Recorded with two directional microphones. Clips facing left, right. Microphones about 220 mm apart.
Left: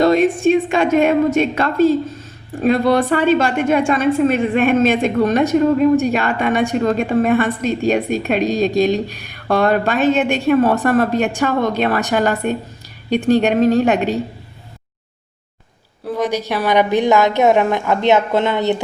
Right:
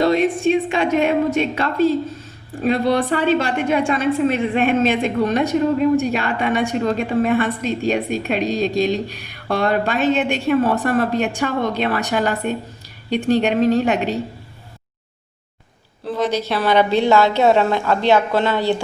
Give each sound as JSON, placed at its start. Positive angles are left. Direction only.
{"t": 0.0, "sound": "a woman's voice", "side_deg": 45}
{"t": 16.0, "sound": "a woman's voice", "side_deg": 15}